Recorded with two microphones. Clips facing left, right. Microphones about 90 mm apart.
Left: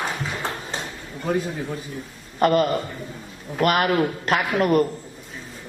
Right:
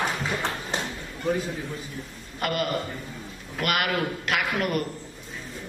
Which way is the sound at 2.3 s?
40° left (ahead or behind).